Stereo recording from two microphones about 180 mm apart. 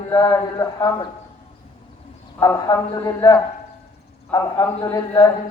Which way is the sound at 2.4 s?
20° left (ahead or behind).